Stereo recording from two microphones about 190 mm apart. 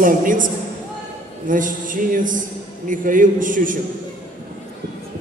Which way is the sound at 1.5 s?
45° right (ahead or behind).